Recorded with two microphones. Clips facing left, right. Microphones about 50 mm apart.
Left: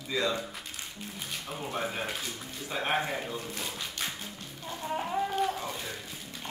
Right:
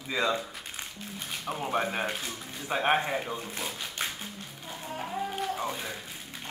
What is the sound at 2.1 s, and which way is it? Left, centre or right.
Speech, centre.